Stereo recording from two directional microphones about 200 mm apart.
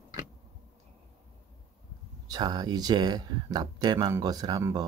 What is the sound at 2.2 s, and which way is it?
Speech, 20° right (ahead or behind).